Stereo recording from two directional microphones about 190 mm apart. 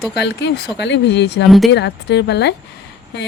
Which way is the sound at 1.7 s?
60° left (ahead or behind).